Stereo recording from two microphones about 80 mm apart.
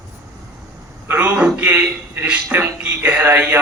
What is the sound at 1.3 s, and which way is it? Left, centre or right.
A man's voice, centre.